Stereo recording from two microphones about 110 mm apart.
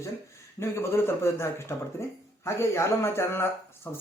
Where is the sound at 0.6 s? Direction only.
25° left (ahead or behind).